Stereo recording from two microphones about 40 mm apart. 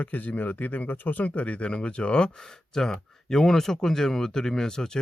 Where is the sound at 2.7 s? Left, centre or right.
Centre.